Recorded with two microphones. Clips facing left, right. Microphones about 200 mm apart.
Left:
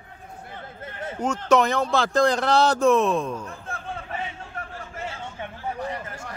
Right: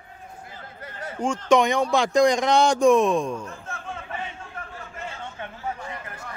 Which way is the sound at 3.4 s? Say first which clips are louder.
Left 1 dB; 35° left (ahead or behind).